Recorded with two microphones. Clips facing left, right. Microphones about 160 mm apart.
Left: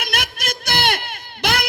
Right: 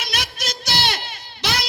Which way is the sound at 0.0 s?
55° left (ahead or behind).